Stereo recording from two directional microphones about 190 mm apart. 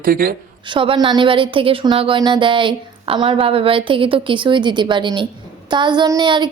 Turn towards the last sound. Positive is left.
turn(degrees=-25)  # may be behind; listen again after turning